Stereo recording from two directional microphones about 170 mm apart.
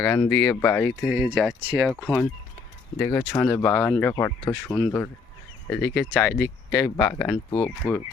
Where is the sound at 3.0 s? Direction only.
15° left (ahead or behind).